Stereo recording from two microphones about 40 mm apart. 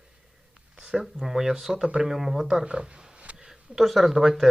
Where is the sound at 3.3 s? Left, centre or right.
Centre.